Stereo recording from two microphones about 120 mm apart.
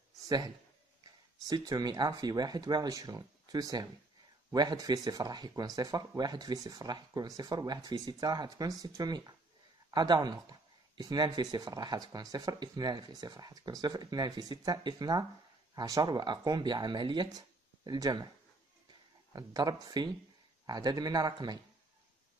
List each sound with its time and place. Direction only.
1.4 s a man's voice: 30° right (ahead or behind)
17.4 s a sound: 35° right (ahead or behind)
19.3 s speech: 35° right (ahead or behind)